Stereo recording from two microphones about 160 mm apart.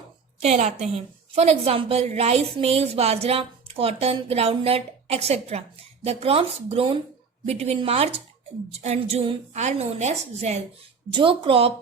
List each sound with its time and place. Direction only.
0.4 s a woman's voice: 45° right (ahead or behind)
11.1 s a woman's voice: 35° right (ahead or behind)